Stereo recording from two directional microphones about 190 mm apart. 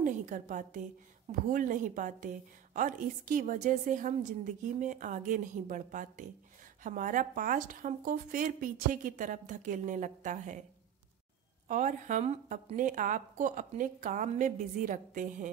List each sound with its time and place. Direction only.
0.0 s a woman's voice: 40° right (ahead or behind)
11.6 s a woman's voice: 40° right (ahead or behind)